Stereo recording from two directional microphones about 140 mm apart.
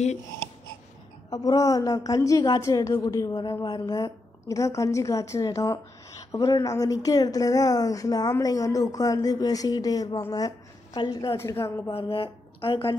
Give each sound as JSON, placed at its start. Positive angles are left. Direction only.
{"t": 1.3, "sound": "a woman's voice", "side_deg": 25}
{"t": 11.9, "sound": "speech", "side_deg": 40}